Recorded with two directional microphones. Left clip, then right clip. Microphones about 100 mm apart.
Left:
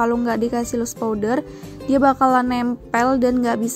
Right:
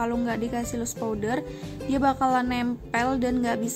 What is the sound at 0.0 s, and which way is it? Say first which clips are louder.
A woman's voice: left 8 dB; 40° left (ahead or behind).